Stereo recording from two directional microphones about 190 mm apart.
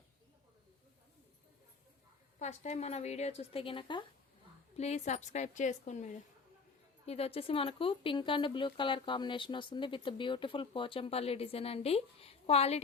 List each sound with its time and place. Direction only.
2.4 s speech: 35° left (ahead or behind)
4.8 s speech: 35° left (ahead or behind)